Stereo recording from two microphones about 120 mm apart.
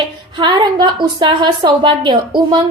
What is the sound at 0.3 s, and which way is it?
A woman's voice, 40° right (ahead or behind).